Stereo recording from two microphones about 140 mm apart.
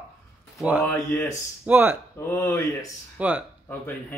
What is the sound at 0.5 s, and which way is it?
Speech, 10° right (ahead or behind).